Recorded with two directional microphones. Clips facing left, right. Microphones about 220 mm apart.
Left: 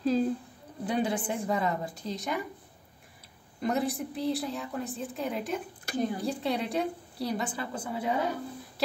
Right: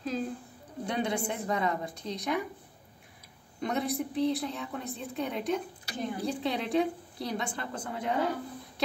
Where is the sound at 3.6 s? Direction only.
Centre (ahead or behind).